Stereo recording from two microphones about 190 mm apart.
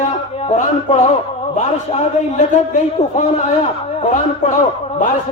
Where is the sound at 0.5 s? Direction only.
40° left (ahead or behind).